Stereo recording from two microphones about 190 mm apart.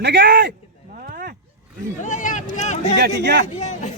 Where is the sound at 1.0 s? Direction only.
50° right (ahead or behind).